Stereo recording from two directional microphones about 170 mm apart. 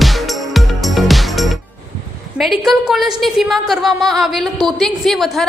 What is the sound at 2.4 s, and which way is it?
A woman's voice, centre (ahead or behind).